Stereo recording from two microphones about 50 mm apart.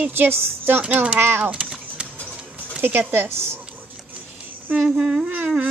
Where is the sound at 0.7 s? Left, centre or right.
Right.